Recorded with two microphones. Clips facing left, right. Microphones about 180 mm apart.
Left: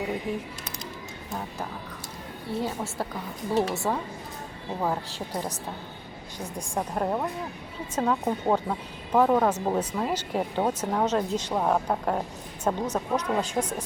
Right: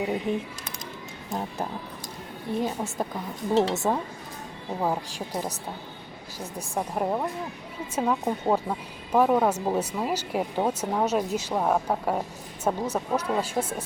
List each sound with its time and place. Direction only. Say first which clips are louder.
0.3 s speech: right 3 dB; 25° right (ahead or behind)
4.8 s speech: right 1 dB; 10° right (ahead or behind)
6.6 s speech: even; 5° right (ahead or behind)